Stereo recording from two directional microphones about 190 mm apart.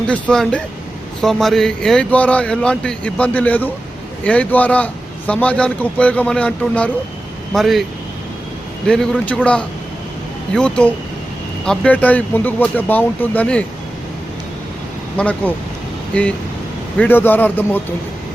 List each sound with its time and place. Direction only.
0.1 s a man's voice: 5° left (ahead or behind)
8.9 s a man's voice: 5° left (ahead or behind)
15.2 s a man's voice: 5° left (ahead or behind)